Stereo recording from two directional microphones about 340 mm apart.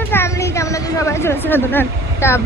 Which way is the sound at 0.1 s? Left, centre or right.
Centre.